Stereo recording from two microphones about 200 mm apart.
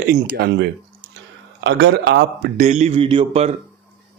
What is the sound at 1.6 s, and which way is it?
Speech, 60° right (ahead or behind).